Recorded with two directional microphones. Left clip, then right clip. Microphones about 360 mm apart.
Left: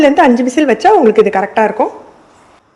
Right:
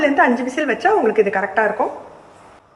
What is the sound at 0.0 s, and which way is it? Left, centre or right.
A woman's voice, centre.